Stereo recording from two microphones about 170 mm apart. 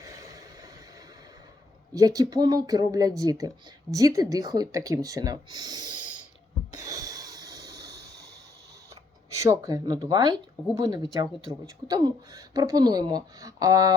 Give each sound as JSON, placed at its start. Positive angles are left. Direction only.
{"t": 0.0, "sound": "vehicle", "side_deg": -20}
{"t": 1.9, "sound": "speech", "side_deg": -20}
{"t": 6.7, "sound": "a sound", "side_deg": -20}
{"t": 9.3, "sound": "speech", "side_deg": -20}